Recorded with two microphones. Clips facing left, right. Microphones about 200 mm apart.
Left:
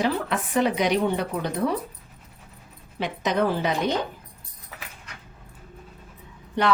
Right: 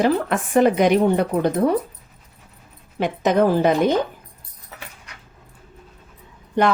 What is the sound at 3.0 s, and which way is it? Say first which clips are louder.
Speech: right 6 dB; 50° right (ahead or behind).